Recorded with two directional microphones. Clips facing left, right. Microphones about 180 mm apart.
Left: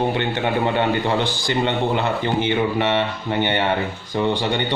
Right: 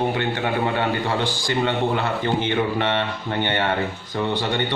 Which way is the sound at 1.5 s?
25° left (ahead or behind).